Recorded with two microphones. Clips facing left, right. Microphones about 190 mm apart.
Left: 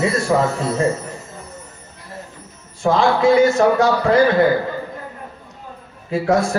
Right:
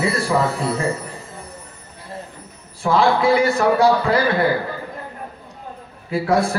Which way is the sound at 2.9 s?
30° right (ahead or behind).